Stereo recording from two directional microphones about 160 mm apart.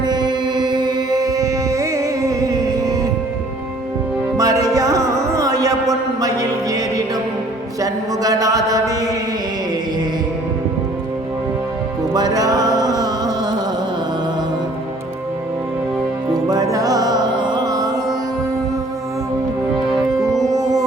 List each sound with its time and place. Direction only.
0.1 s music: 25° right (ahead or behind)
4.4 s music: 20° right (ahead or behind)
7.8 s mantra: 20° right (ahead or behind)
12.1 s music: 25° right (ahead or behind)
16.3 s music: 20° right (ahead or behind)
20.5 s music: 20° right (ahead or behind)